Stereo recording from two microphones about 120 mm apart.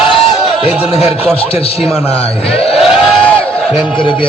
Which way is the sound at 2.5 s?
55° left (ahead or behind).